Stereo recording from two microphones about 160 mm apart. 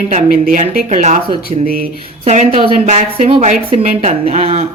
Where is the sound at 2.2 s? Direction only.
50° right (ahead or behind).